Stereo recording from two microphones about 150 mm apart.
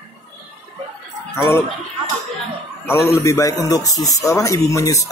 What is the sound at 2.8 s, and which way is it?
A man's voice, 15° left (ahead or behind).